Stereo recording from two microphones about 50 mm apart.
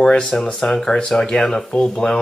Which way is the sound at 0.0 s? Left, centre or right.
Centre.